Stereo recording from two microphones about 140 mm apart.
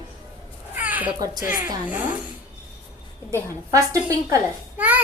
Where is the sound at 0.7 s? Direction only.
10° right (ahead or behind).